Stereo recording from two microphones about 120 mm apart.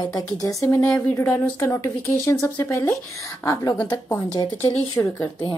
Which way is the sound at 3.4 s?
30° left (ahead or behind).